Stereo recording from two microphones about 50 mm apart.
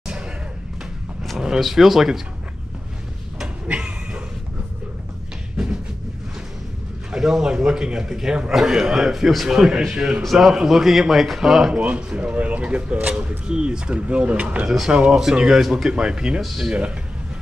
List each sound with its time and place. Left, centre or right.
1.6 s speech: centre
3.6 s a sound: right
7.1 s a man's voice: centre
9.9 s a man's voice: centre
10.3 s a man's voice: centre
11.7 s a man's voice: right; by 15.9 s centre
15.9 s a man's voice: centre
16.3 s speech: centre